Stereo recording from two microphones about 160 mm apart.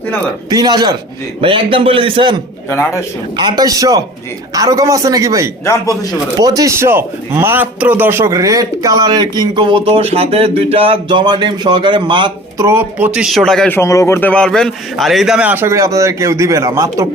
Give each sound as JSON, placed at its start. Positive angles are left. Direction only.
{"t": 0.5, "sound": "a man's voice", "side_deg": -25}
{"t": 2.6, "sound": "a man's voice", "side_deg": 15}
{"t": 3.3, "sound": "a man's voice", "side_deg": -25}
{"t": 5.6, "sound": "speech", "side_deg": 20}
{"t": 6.4, "sound": "a man's voice", "side_deg": -25}
{"t": 12.6, "sound": "speech", "side_deg": -10}